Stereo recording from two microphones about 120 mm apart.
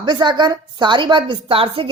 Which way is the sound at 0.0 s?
40° right (ahead or behind).